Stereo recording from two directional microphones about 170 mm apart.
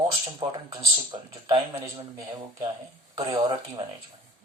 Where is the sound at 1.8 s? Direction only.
20° right (ahead or behind).